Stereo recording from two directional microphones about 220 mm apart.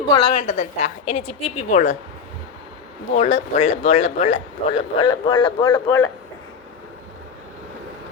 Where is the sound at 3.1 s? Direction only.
30° left (ahead or behind).